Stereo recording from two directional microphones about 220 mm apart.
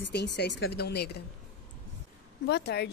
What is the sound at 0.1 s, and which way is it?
A woman's voice, 50° left (ahead or behind).